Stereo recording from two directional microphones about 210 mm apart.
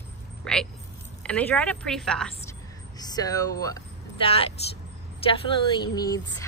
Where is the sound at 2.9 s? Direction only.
20° left (ahead or behind).